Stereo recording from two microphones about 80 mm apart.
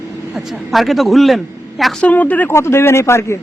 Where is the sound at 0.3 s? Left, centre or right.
Centre.